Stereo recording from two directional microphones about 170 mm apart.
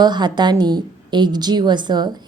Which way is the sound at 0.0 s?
25° right (ahead or behind).